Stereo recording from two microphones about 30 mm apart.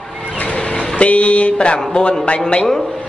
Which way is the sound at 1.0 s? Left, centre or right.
Left.